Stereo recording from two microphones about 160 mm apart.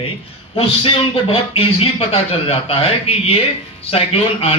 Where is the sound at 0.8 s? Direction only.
35° left (ahead or behind).